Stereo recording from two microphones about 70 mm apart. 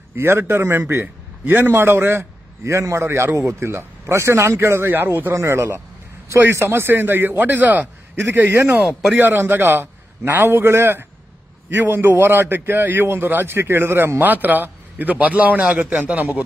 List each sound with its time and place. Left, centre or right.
0.1 s a man's voice: right
5.3 s a man's voice: right
8.2 s a man's voice: right